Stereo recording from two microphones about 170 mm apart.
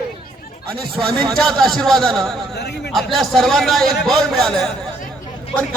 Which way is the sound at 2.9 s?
Centre (ahead or behind).